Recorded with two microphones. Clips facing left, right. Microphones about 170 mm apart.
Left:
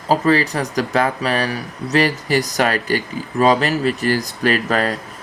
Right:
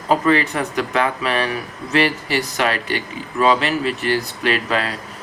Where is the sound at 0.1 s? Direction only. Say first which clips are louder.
Left 1 dB; 35° left (ahead or behind).